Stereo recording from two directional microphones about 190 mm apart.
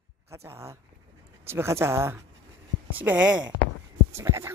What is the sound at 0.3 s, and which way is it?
Speech, 15° right (ahead or behind).